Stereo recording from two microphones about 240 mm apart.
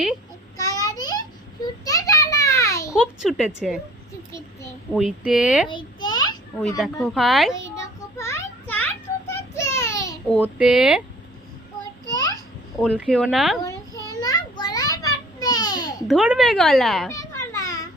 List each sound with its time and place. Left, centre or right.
0.5 s a sound: centre
2.9 s speech: centre
4.9 s speech: centre
5.6 s babbling: centre
7.0 s speech: centre
7.5 s a sound: centre
10.4 s speech: centre
12.1 s a sound: centre
12.8 s speech: centre
13.7 s a sound: centre
16.0 s speech: centre
17.1 s children playing: centre